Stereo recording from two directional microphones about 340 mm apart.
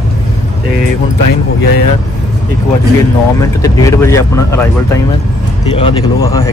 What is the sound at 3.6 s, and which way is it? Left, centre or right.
Speech, centre.